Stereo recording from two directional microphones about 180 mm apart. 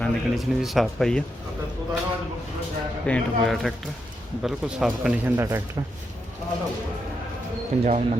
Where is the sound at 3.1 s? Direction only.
Centre (ahead or behind).